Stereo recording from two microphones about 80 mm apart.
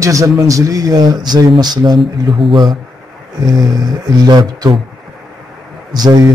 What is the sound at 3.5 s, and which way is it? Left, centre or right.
Speech, right.